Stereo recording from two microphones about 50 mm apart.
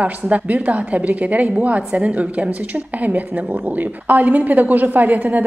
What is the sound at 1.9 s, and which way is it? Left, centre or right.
Speech, centre.